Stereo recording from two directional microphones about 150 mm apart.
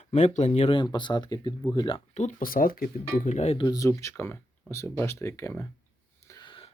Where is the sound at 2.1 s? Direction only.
50° left (ahead or behind).